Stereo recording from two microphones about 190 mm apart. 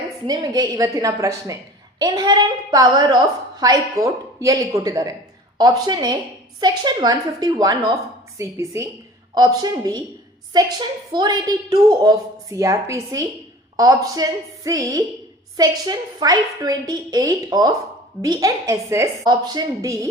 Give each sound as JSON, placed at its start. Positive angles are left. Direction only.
{"t": 0.3, "sound": "a woman's voice", "side_deg": -20}